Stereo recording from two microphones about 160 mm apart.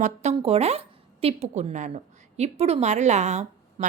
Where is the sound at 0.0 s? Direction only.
45° right (ahead or behind).